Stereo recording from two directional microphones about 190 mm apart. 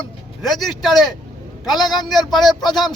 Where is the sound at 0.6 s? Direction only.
Centre (ahead or behind).